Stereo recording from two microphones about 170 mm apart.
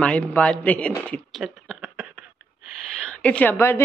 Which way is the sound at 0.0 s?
5° left (ahead or behind).